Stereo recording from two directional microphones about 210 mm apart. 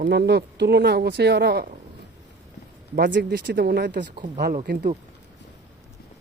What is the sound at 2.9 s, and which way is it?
Speech, 55° right (ahead or behind).